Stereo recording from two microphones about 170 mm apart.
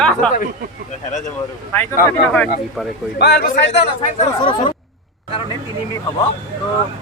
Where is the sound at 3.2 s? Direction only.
75° left (ahead or behind).